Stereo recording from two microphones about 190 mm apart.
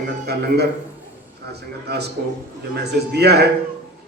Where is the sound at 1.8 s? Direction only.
60° right (ahead or behind).